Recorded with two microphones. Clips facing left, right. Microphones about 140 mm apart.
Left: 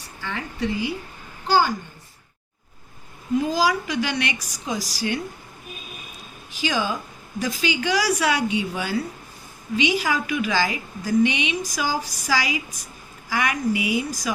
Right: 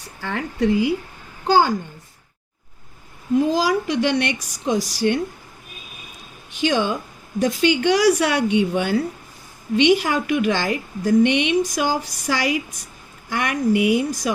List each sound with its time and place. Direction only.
0.2 s a woman's voice: 55° right (ahead or behind)
3.3 s a woman's voice: 55° right (ahead or behind)
6.6 s a woman's voice: 60° right (ahead or behind)